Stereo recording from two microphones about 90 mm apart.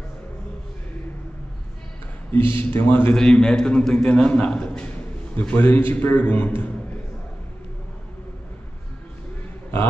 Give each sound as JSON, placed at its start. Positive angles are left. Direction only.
{"t": 2.5, "sound": "a man's voice", "side_deg": 20}
{"t": 3.2, "sound": "a man's voice", "side_deg": 10}